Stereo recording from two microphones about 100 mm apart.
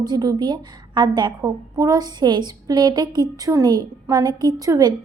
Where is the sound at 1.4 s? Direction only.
35° right (ahead or behind).